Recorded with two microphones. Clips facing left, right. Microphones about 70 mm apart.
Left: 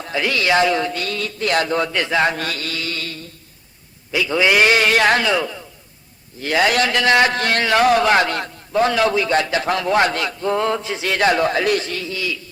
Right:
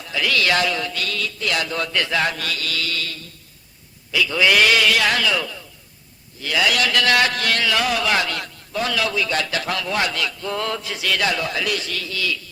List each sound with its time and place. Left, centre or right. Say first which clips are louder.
0.0 s a man's voice: left 1 dB; left
2.3 s a man's voice: left 2 dB; left
6.4 s a man's voice: left 4 dB; left